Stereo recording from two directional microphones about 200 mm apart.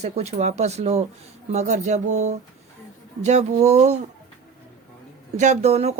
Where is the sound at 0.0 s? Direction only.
35° right (ahead or behind).